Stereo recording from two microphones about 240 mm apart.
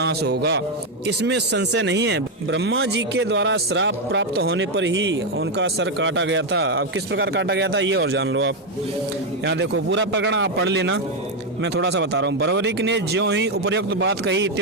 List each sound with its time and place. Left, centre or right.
0.0 s speech: right